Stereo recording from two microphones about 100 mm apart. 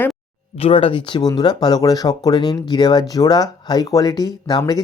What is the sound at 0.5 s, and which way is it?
Speech, 75° left (ahead or behind).